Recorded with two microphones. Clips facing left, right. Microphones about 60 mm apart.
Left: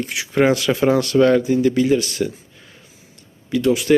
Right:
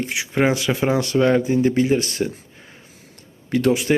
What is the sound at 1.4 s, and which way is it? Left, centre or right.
Speech, right.